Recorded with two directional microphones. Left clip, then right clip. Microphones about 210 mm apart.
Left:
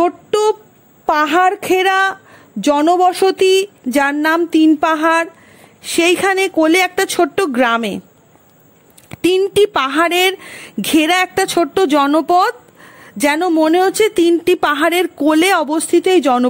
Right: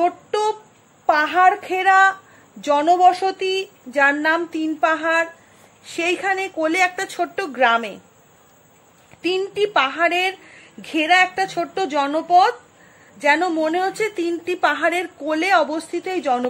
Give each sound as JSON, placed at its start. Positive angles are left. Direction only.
{"t": 0.0, "sound": "a sound", "side_deg": 45}
{"t": 1.0, "sound": "speech", "side_deg": 50}
{"t": 9.1, "sound": "speech", "side_deg": 50}